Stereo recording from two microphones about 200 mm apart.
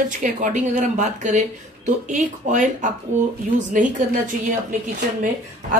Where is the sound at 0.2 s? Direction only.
40° right (ahead or behind).